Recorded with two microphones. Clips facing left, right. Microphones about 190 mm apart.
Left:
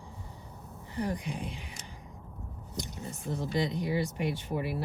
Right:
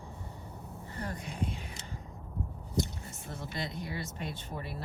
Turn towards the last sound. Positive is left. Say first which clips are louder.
# left 8 dB
turn(degrees=15)  # may be behind; listen again after turning